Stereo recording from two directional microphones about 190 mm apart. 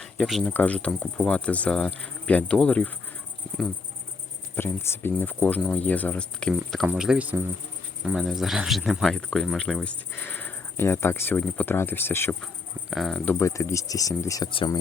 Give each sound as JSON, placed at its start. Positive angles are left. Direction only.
{"t": 0.0, "sound": "speech", "side_deg": 0}
{"t": 4.5, "sound": "speech", "side_deg": 10}
{"t": 12.9, "sound": "speech", "side_deg": 0}
{"t": 13.4, "sound": "speech", "side_deg": 15}